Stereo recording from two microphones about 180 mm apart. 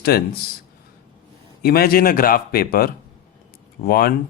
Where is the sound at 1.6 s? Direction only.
55° left (ahead or behind).